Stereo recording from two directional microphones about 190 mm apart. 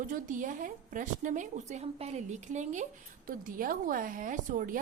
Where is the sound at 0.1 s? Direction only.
45° right (ahead or behind).